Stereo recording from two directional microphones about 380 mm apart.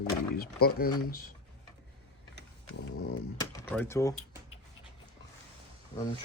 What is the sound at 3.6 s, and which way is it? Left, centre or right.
Speech, centre.